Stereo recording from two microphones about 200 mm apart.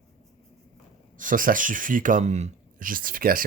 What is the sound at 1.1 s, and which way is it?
Speech, 40° right (ahead or behind).